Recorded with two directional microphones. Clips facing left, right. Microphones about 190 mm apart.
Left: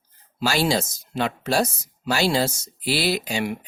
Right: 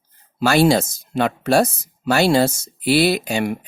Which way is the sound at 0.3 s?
55° right (ahead or behind).